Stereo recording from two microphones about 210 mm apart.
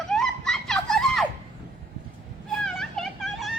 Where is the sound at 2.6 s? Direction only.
Centre (ahead or behind).